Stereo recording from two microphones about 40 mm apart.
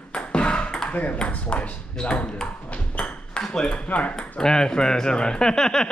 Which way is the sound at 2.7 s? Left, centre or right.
Left.